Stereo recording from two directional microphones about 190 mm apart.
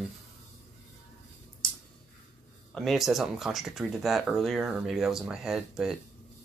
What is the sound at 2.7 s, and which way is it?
Speech, centre (ahead or behind).